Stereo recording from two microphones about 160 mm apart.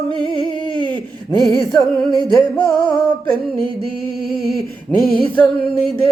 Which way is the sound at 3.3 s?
35° right (ahead or behind).